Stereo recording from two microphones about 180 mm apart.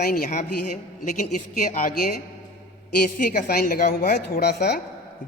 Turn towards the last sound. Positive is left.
turn(degrees=65)  # may be behind; listen again after turning